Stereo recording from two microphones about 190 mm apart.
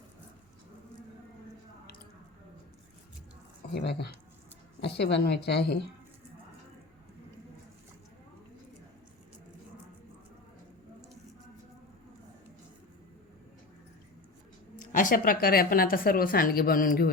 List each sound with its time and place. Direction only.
3.8 s a woman's voice: 60° left (ahead or behind)
14.8 s a woman's voice: 45° left (ahead or behind)